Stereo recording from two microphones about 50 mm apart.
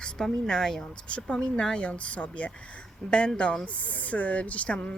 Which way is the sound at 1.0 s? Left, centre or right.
Left.